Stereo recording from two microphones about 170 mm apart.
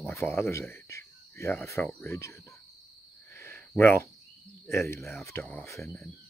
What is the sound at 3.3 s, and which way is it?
Cricket, 15° left (ahead or behind).